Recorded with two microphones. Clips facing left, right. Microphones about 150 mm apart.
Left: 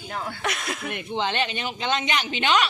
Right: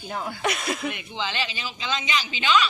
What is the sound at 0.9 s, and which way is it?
Speech, 55° left (ahead or behind).